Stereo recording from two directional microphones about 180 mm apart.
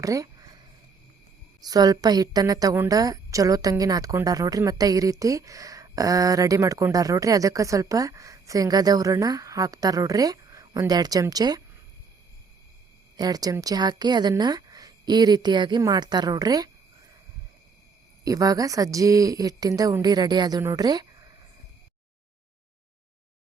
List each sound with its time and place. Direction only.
0.0 s a sound: 20° right (ahead or behind)
1.6 s a woman's voice: 20° right (ahead or behind)
13.1 s a woman's voice: 20° right (ahead or behind)
18.3 s a woman's voice: 20° right (ahead or behind)